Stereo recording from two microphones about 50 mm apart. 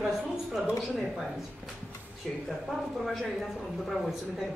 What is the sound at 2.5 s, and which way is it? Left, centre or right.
Speech, centre.